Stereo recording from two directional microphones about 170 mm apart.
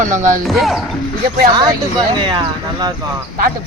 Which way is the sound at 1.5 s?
25° right (ahead or behind).